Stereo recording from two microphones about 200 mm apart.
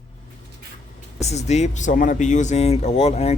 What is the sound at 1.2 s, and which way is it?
Speech, 35° left (ahead or behind).